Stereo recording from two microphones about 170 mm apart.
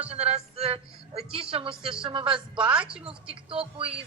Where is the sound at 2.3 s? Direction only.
5° right (ahead or behind).